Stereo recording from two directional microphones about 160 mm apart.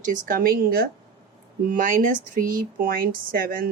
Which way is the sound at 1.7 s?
55° right (ahead or behind).